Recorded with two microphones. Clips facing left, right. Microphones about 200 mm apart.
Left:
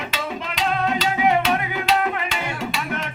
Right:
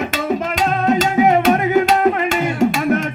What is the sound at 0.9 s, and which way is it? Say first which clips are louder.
Music: right 8 dB; 45° right (ahead or behind).